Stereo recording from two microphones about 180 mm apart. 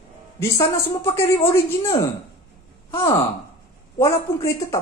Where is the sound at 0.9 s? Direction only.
15° left (ahead or behind).